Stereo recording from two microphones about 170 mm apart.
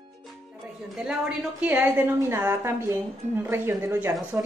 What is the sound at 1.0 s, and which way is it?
A woman's voice, 5° right (ahead or behind).